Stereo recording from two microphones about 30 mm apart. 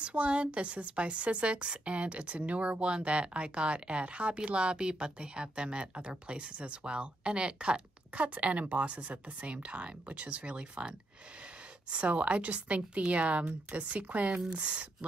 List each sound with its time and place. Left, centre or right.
0.0 s a woman's voice: right
4.6 s speech: right
8.2 s a woman's voice: right
11.9 s a woman's voice: right